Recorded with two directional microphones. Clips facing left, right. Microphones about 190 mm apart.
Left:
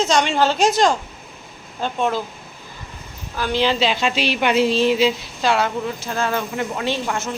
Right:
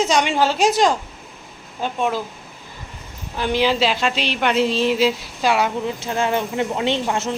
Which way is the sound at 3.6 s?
5° right (ahead or behind).